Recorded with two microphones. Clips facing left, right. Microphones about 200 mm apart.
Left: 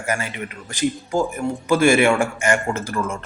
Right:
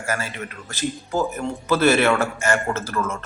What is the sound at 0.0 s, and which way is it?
A man's voice, 15° left (ahead or behind).